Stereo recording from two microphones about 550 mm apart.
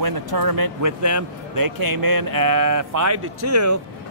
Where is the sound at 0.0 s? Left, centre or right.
Right.